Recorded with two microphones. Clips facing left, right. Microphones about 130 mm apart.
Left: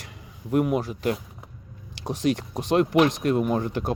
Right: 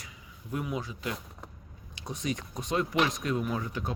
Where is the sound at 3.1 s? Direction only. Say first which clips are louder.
Left 8 dB; 55° left (ahead or behind).